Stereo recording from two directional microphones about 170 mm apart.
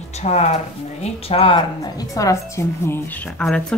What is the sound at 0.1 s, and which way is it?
A woman's voice, 40° left (ahead or behind).